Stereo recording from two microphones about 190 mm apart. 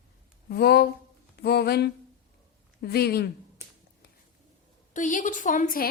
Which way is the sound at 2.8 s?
55° left (ahead or behind).